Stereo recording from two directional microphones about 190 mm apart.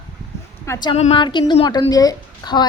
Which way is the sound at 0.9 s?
30° left (ahead or behind).